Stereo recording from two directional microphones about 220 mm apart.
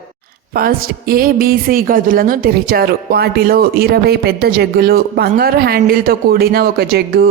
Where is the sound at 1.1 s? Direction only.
40° right (ahead or behind).